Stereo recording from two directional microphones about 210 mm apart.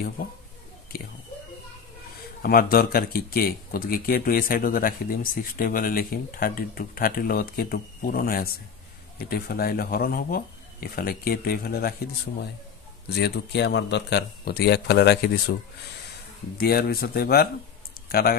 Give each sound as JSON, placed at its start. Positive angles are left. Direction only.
{"t": 0.9, "sound": "speech", "side_deg": 45}
{"t": 2.4, "sound": "speech", "side_deg": 45}
{"t": 13.1, "sound": "speech", "side_deg": 55}
{"t": 16.5, "sound": "speech", "side_deg": 50}